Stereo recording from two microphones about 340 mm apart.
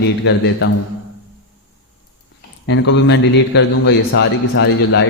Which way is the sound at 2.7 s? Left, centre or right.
Left.